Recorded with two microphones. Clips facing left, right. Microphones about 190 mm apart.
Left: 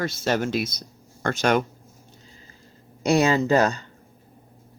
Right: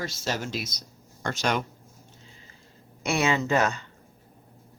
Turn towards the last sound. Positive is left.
turn(degrees=35)  # may be behind; listen again after turning